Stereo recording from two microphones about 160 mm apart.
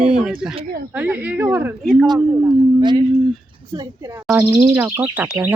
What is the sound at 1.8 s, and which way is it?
Speech, 5° left (ahead or behind).